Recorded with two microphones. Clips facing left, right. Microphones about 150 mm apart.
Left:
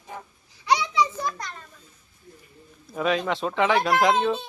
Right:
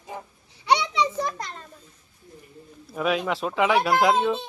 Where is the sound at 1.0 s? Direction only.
25° right (ahead or behind).